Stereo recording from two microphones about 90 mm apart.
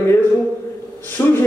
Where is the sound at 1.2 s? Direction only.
25° left (ahead or behind).